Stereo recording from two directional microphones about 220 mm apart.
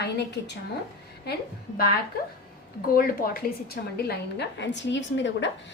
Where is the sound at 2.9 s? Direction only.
40° left (ahead or behind).